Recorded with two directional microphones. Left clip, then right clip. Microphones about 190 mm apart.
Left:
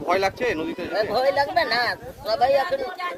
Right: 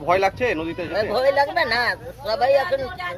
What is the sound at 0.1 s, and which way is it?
Speech, 30° right (ahead or behind).